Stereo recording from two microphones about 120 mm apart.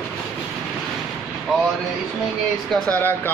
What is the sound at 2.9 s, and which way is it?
Speech, 15° left (ahead or behind).